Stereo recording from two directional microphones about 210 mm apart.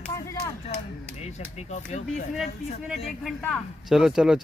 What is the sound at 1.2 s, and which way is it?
Speech, 30° left (ahead or behind).